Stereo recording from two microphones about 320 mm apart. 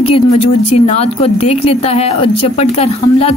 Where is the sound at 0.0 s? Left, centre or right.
Centre.